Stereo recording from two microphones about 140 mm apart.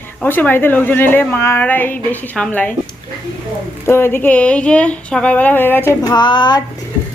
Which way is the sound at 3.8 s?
15° left (ahead or behind).